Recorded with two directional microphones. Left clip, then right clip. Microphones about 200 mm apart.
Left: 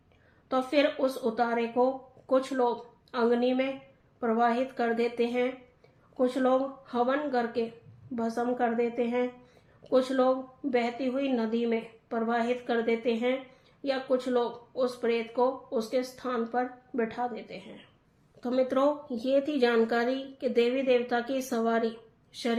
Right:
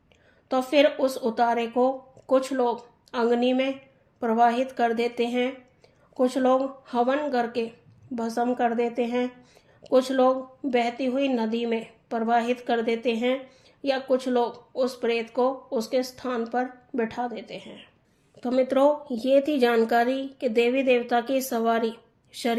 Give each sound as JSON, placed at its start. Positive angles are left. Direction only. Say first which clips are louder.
{"t": 0.4, "sound": "speech", "louder": "right 5 dB", "side_deg": -40}